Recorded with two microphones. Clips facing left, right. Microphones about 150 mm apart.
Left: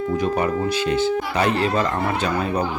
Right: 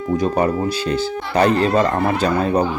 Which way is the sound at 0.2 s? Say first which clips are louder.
Right 4 dB; 35° right (ahead or behind).